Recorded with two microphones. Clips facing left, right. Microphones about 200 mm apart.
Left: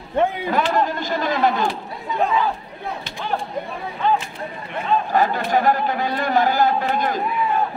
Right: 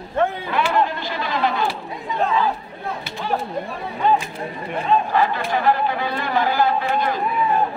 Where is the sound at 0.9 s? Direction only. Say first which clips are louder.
Left 3 dB; 45° left (ahead or behind).